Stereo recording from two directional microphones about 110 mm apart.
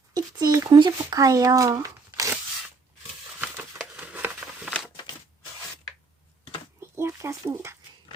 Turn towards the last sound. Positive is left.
turn(degrees=-30)  # may be behind; listen again after turning